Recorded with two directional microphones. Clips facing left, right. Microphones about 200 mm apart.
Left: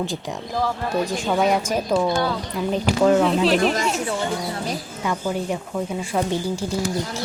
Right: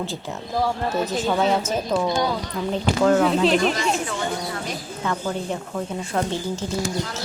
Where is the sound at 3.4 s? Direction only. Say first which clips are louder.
Even; centre (ahead or behind).